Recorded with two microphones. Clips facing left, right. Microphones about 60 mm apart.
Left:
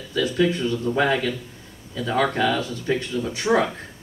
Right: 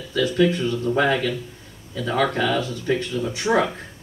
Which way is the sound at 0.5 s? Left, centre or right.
Right.